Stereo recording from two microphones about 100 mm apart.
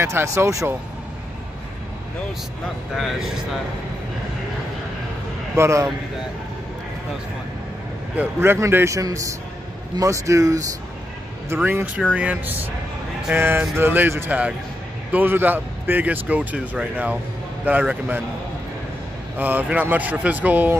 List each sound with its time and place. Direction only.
0.0 s speech: 30° right (ahead or behind)
5.6 s speech: 30° right (ahead or behind)
8.2 s speech: 25° right (ahead or behind)
11.4 s a man's voice: 20° right (ahead or behind)
19.3 s a man's voice: 15° right (ahead or behind)